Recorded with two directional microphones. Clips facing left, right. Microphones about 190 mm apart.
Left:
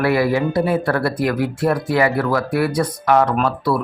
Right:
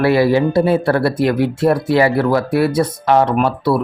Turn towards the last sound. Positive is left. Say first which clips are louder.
# right 3 dB
turn(degrees=-25)  # may be behind; listen again after turning